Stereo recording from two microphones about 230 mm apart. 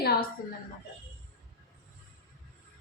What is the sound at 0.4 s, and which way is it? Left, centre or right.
Speech, left.